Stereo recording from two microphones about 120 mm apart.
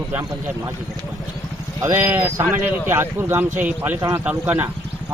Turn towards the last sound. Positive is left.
turn(degrees=-15)  # may be behind; listen again after turning